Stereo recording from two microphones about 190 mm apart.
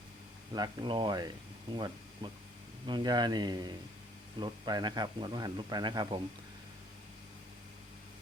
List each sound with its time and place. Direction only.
0.5 s a man's voice: 20° right (ahead or behind)